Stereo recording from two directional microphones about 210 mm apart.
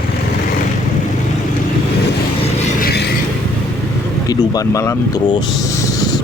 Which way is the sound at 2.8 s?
50° left (ahead or behind).